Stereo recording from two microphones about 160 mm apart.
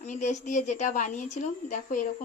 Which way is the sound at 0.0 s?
50° left (ahead or behind).